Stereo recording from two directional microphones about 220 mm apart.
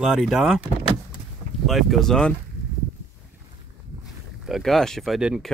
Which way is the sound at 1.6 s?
Centre (ahead or behind).